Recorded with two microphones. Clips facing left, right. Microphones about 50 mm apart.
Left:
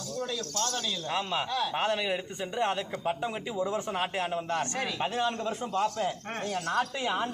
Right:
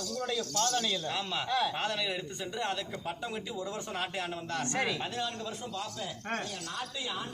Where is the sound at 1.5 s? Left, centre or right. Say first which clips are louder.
Right 1 dB; centre.